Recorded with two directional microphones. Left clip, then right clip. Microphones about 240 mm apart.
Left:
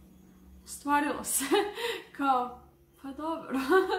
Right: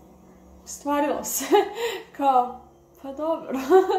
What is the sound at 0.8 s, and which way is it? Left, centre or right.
Speech, centre.